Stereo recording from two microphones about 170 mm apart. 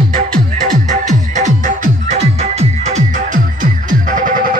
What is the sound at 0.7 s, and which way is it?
Music, 50° right (ahead or behind).